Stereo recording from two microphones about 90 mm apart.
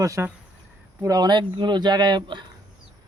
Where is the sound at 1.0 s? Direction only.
45° right (ahead or behind).